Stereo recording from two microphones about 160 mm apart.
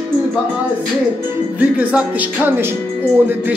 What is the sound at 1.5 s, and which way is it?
Speech, 10° right (ahead or behind).